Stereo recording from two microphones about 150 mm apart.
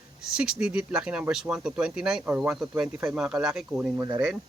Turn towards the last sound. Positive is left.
turn(degrees=-20)  # may be behind; listen again after turning